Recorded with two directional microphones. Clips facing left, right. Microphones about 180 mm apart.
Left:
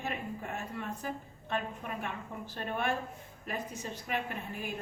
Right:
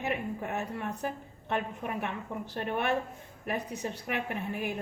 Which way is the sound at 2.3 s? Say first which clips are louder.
Right 5 dB; 70° right (ahead or behind).